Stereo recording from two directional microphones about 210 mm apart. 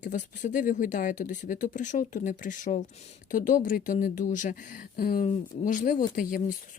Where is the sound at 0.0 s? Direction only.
35° left (ahead or behind).